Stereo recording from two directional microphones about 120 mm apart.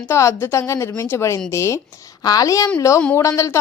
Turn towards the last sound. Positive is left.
turn(degrees=25)  # may be behind; listen again after turning